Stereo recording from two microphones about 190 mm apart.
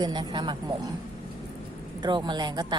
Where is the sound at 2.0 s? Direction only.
25° right (ahead or behind).